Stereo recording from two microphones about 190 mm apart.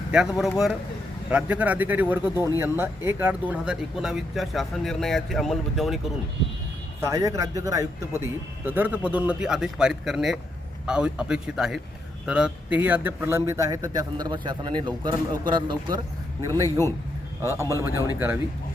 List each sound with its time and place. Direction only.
0.1 s speech: centre (ahead or behind)
7.0 s speech: 15° right (ahead or behind)
17.4 s speech: 15° right (ahead or behind)